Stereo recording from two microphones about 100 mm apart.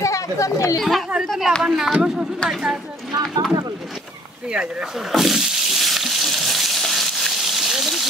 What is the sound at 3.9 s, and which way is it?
Water, 10° right (ahead or behind).